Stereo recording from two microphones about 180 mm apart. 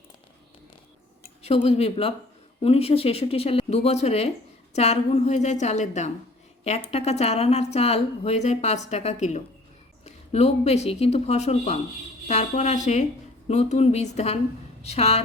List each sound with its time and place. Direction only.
1.4 s a woman's voice: 35° left (ahead or behind)